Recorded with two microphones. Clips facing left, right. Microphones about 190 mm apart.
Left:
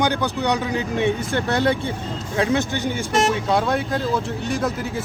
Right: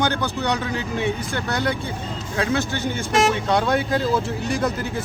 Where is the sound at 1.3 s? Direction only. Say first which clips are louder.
Left 4 dB; 30° left (ahead or behind).